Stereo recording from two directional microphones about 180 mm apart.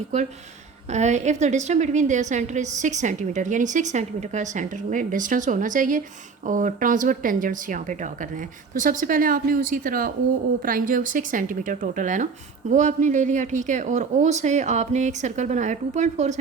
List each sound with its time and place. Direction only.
0.9 s a woman's voice: 40° right (ahead or behind)